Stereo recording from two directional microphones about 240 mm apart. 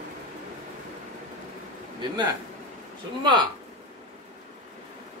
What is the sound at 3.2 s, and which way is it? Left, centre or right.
Speech, centre.